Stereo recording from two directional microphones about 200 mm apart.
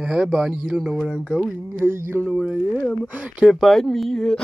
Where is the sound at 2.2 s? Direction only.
Centre (ahead or behind).